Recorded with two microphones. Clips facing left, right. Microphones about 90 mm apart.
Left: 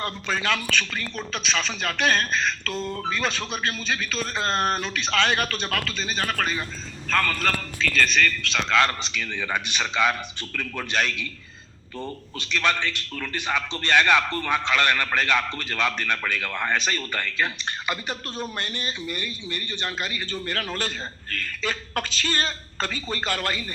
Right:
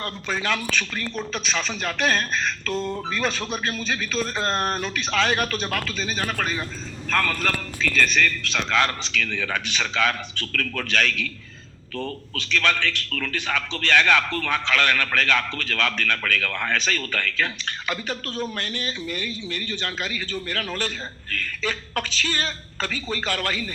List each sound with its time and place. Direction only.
0.3 s speech: 10° right (ahead or behind)
9.0 s a man's voice: 15° left (ahead or behind)
20.3 s a woman's voice: 25° left (ahead or behind)